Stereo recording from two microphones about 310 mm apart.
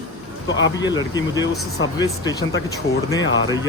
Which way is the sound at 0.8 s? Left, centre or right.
Centre.